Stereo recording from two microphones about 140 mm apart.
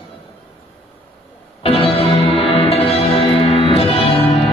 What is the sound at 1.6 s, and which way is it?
Music, 45° left (ahead or behind).